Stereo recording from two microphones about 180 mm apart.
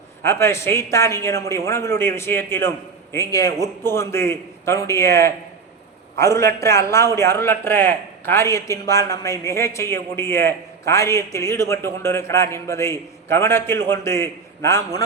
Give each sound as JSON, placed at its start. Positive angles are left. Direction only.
{"t": 0.2, "sound": "a man's voice", "side_deg": 15}